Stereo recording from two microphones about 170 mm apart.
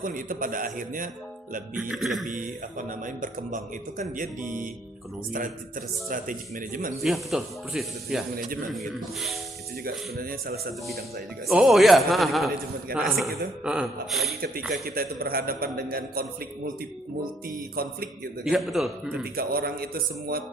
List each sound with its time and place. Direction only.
0.0 s speech: 55° right (ahead or behind)
1.7 s speech: centre (ahead or behind)
2.2 s speech: 50° right (ahead or behind)
6.1 s speech: 55° right (ahead or behind)
7.0 s speech: centre (ahead or behind)
10.2 s a man's voice: 60° right (ahead or behind)
11.4 s speech: centre (ahead or behind)
14.8 s a man's voice: 65° right (ahead or behind)
17.5 s a man's voice: 65° right (ahead or behind)
18.4 s speech: centre (ahead or behind)
19.2 s a man's voice: 60° right (ahead or behind)